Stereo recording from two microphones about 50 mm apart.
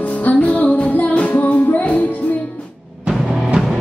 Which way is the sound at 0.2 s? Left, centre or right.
Left.